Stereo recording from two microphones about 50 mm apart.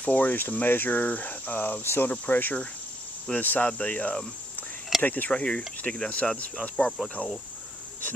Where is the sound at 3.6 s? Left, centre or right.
Left.